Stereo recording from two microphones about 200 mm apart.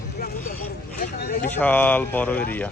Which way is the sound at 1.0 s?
45° left (ahead or behind).